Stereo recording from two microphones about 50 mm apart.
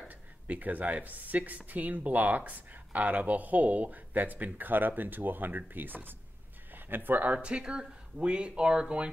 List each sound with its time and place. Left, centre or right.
0.1 s speech: right
7.3 s speech: centre